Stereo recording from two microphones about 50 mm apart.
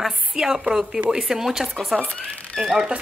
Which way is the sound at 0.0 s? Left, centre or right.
Centre.